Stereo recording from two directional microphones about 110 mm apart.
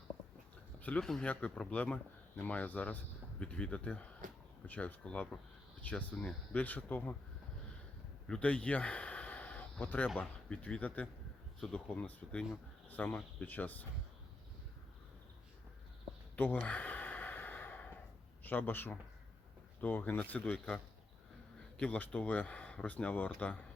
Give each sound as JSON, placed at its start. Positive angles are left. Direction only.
{"t": 0.8, "sound": "speech", "side_deg": 15}
{"t": 8.3, "sound": "a sound", "side_deg": 10}
{"t": 10.2, "sound": "speech", "side_deg": 15}
{"t": 16.3, "sound": "sigh", "side_deg": 15}
{"t": 18.4, "sound": "speech", "side_deg": 15}